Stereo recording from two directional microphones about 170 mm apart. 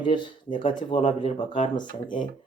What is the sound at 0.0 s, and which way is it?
Speech, 30° left (ahead or behind).